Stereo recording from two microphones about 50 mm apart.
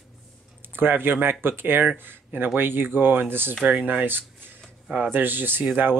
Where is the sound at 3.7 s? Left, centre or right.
Right.